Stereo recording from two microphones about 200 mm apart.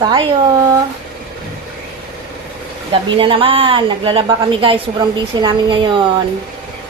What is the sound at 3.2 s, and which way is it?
A woman's voice, 25° right (ahead or behind).